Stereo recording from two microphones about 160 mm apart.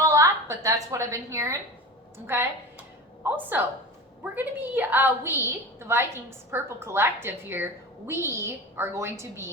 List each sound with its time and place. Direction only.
0.0 s a woman's voice: 20° right (ahead or behind)